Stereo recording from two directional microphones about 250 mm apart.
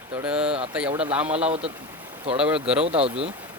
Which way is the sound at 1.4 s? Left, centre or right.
Right.